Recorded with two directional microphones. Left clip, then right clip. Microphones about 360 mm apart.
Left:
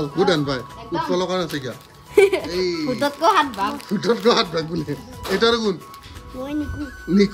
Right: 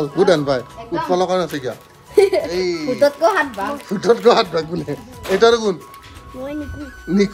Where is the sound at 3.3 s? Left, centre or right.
Centre.